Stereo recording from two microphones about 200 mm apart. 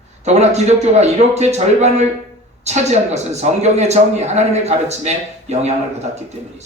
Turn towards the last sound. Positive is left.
turn(degrees=-35)  # may be behind; listen again after turning